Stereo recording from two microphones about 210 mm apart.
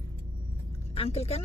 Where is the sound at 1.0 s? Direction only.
30° left (ahead or behind).